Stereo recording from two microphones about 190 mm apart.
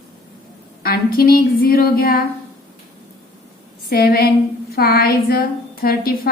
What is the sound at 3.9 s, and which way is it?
A woman's voice, 55° left (ahead or behind).